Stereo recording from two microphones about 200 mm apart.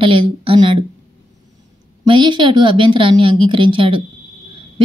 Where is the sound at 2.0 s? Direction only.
25° right (ahead or behind).